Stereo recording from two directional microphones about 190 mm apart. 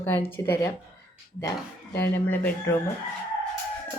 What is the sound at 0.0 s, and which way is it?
Speech, 10° left (ahead or behind).